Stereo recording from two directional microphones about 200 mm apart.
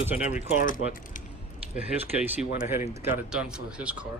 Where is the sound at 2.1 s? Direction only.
10° right (ahead or behind).